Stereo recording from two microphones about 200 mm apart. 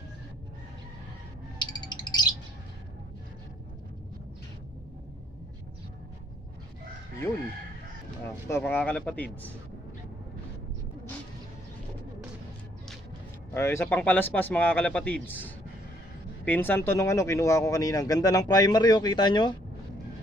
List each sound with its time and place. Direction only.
1.6 s bird: 20° left (ahead or behind)
8.5 s speech: 10° left (ahead or behind)
13.5 s speech: 15° left (ahead or behind)